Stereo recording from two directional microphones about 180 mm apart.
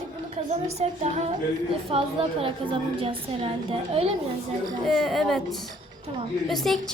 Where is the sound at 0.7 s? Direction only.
35° right (ahead or behind).